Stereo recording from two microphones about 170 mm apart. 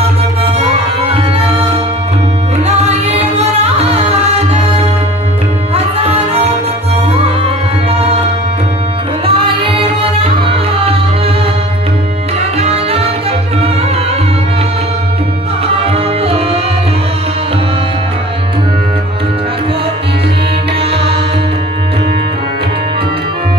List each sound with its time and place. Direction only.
0.4 s music: 35° right (ahead or behind)
5.8 s tabla: 35° right (ahead or behind)
7.4 s music: 35° right (ahead or behind)
9.2 s music: 30° right (ahead or behind)
12.5 s music: 35° right (ahead or behind)